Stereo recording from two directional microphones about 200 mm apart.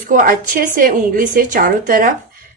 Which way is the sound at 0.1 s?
45° right (ahead or behind).